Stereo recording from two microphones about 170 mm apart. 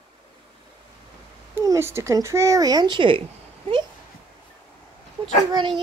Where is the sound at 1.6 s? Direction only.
15° right (ahead or behind).